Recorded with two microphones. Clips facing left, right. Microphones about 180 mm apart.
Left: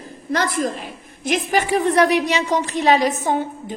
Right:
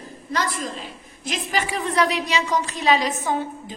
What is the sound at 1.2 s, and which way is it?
A woman's voice, 55° left (ahead or behind).